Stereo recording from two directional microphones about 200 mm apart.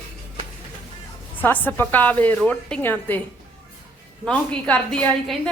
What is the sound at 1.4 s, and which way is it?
A woman's voice, 10° left (ahead or behind).